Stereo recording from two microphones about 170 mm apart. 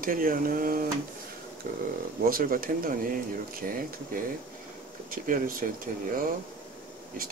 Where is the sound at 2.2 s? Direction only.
55° right (ahead or behind).